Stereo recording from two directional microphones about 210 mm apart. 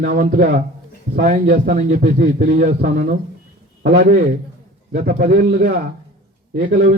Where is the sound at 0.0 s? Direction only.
40° right (ahead or behind).